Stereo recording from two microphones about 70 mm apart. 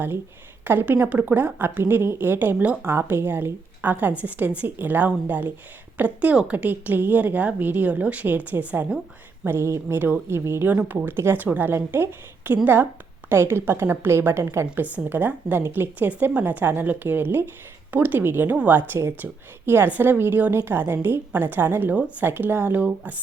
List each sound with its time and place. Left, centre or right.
0.6 s a woman's voice: right
9.5 s a woman's voice: right
10.7 s a woman's voice: right
10.9 s a woman's voice: right
14.8 s a woman's voice: right
22.2 s a woman's voice: right